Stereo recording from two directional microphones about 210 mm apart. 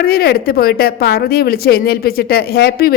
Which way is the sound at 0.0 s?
45° left (ahead or behind).